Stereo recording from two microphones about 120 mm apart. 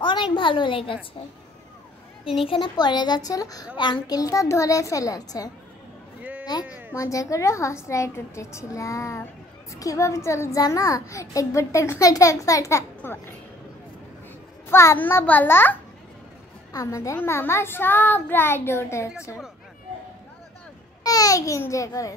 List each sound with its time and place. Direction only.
0.0 s a woman's voice: 40° left (ahead or behind)
2.4 s a woman's voice: 45° left (ahead or behind)
6.5 s a woman's voice: 35° left (ahead or behind)
14.7 s a child's voice: 20° left (ahead or behind)
21.0 s a child's voice: 30° left (ahead or behind)